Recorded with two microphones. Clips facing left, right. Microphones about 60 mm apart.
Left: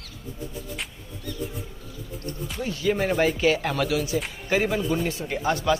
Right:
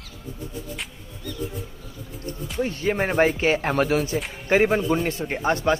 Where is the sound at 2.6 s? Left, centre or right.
Right.